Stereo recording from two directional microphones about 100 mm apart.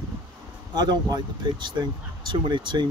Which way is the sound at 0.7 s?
45° right (ahead or behind).